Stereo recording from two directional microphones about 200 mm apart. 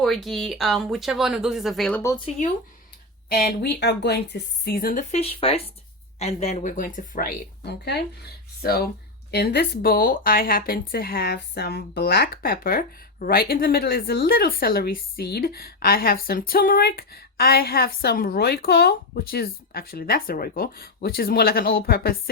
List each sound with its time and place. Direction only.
0.0 s speech: centre (ahead or behind)
2.0 s speech: 15° left (ahead or behind)
3.2 s speech: 50° left (ahead or behind)
5.1 s a woman's voice: 30° left (ahead or behind); by 22.2 s 50° left (ahead or behind)